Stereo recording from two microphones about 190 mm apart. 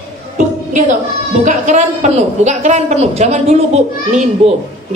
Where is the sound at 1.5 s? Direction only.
40° right (ahead or behind).